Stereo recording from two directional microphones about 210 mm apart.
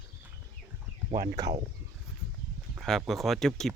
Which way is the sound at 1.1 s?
35° right (ahead or behind).